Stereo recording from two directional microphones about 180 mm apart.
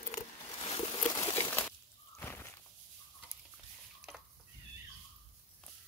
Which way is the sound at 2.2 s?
10° left (ahead or behind).